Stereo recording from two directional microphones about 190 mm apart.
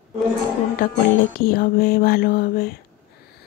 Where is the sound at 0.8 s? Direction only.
45° left (ahead or behind).